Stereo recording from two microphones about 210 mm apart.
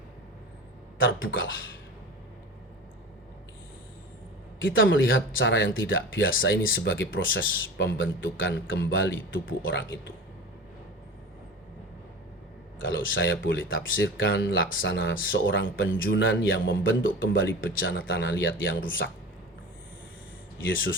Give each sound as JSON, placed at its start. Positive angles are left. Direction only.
{"t": 0.9, "sound": "speech", "side_deg": 65}
{"t": 4.6, "sound": "speech", "side_deg": 65}
{"t": 12.8, "sound": "speech", "side_deg": 65}
{"t": 19.0, "sound": "speech", "side_deg": 55}
{"t": 20.7, "sound": "speech", "side_deg": 65}